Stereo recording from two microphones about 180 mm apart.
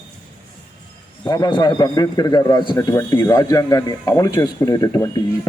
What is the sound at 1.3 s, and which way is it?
Speech, 25° left (ahead or behind).